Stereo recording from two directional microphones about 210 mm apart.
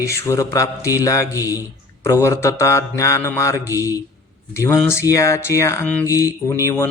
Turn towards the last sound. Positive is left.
turn(degrees=10)  # may be behind; listen again after turning